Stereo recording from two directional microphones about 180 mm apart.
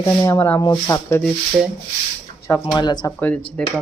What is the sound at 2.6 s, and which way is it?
Speech, 25° left (ahead or behind).